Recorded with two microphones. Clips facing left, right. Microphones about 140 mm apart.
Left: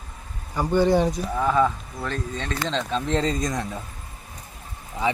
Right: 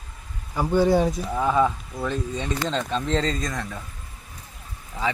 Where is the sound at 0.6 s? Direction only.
5° right (ahead or behind); by 3.8 s 15° left (ahead or behind).